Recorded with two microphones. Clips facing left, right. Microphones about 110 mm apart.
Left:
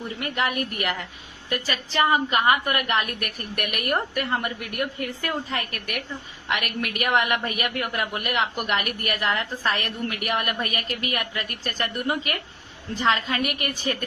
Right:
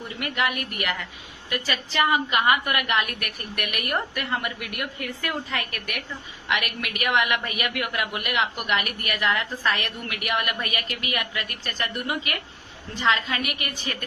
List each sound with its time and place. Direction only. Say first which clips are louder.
0.2 s a woman's voice: even; 35° left (ahead or behind)